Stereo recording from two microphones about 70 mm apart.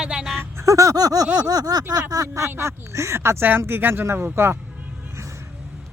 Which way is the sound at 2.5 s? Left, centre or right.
Right.